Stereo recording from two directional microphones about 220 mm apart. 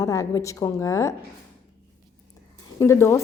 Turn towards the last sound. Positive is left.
turn(degrees=10)  # may be behind; listen again after turning